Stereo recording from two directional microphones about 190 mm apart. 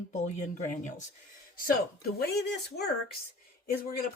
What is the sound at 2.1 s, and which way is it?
Speech, 60° left (ahead or behind).